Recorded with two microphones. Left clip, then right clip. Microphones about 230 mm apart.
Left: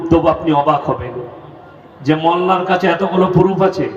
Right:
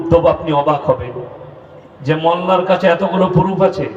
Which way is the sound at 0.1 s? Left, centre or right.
Right.